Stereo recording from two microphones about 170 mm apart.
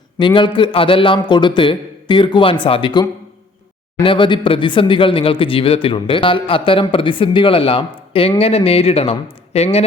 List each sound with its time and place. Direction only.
0.2 s a man's voice: 30° left (ahead or behind)